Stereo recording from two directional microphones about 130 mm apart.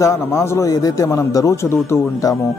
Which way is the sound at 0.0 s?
20° left (ahead or behind).